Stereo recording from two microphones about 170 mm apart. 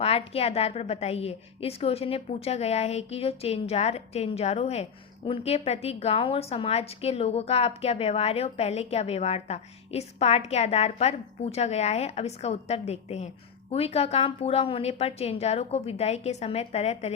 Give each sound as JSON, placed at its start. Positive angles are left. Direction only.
{"t": 0.0, "sound": "a woman's voice", "side_deg": 35}